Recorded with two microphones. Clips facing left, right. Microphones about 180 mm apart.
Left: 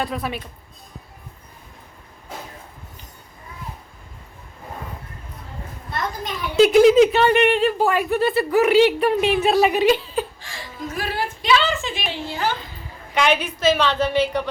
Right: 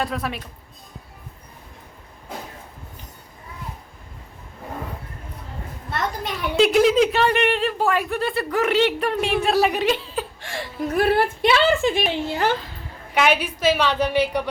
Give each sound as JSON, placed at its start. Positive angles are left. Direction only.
{"t": 0.0, "sound": "speech", "side_deg": 0}
{"t": 6.6, "sound": "speech", "side_deg": 0}
{"t": 10.4, "sound": "laughter", "side_deg": -65}
{"t": 10.8, "sound": "a woman's voice", "side_deg": -55}
{"t": 13.1, "sound": "a woman's voice", "side_deg": -5}